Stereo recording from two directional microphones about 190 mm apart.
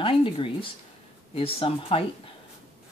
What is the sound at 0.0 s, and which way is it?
Speech, 25° left (ahead or behind).